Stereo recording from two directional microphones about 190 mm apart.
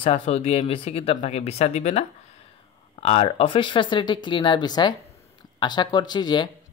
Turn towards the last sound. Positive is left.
turn(degrees=25)  # may be behind; listen again after turning